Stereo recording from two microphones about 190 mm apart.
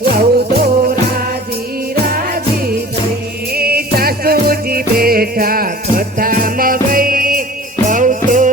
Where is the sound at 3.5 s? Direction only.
50° right (ahead or behind).